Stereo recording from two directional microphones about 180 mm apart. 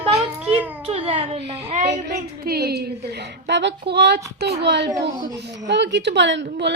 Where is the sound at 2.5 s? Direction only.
60° right (ahead or behind).